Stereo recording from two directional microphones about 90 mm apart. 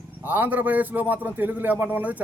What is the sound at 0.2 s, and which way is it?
A man's voice, 20° right (ahead or behind).